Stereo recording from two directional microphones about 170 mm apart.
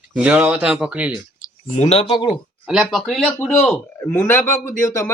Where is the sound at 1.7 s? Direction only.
40° left (ahead or behind).